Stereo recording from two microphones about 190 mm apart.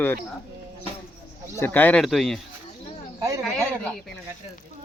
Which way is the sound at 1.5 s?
10° left (ahead or behind).